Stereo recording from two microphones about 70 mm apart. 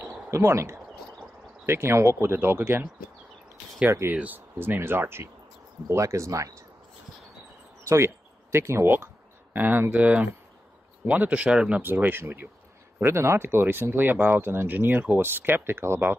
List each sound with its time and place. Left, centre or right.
0.0 s a sound: right
1.7 s speech: right
4.1 s speech: right
5.9 s speech: right
7.9 s speech: right; by 11.8 s centre
11.8 s speech: right
13.0 s speech: right